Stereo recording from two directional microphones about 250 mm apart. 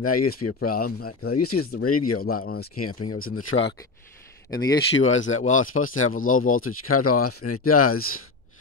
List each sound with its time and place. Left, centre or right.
0.0 s speech: left
2.3 s speech: left
2.8 s speech: left
3.2 s speech: left
4.5 s speech: centre
4.7 s speech: left